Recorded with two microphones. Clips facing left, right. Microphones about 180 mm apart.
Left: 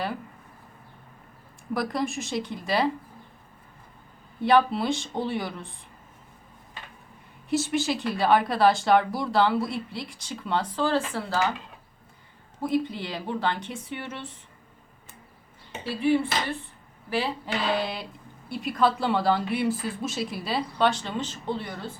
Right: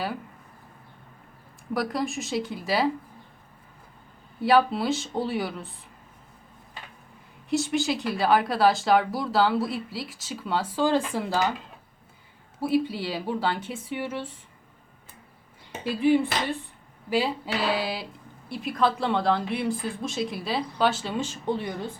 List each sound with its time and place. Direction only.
1.7 s speech: centre (ahead or behind)
4.4 s speech: 5° right (ahead or behind)
7.5 s speech: centre (ahead or behind); by 11.5 s 15° right (ahead or behind)
12.5 s speech: 10° right (ahead or behind)
15.8 s speech: 15° right (ahead or behind)